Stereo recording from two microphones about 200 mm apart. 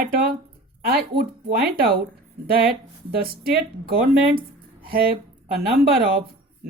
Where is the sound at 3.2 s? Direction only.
50° right (ahead or behind).